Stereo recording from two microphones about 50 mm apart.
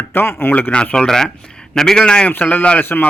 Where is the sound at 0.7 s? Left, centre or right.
Left.